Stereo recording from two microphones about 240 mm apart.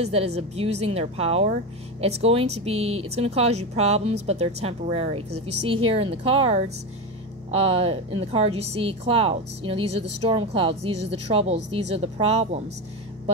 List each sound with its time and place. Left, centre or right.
0.0 s speech: right
5.3 s a woman's voice: right
5.9 s speech: right